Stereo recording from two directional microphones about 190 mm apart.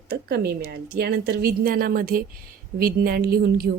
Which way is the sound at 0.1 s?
55° right (ahead or behind).